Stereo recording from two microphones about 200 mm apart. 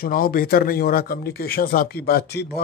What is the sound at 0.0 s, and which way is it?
Speech, 45° left (ahead or behind).